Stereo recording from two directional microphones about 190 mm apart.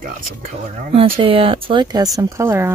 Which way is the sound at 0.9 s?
30° right (ahead or behind).